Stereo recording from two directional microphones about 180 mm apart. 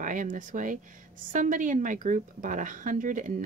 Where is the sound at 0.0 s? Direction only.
45° right (ahead or behind).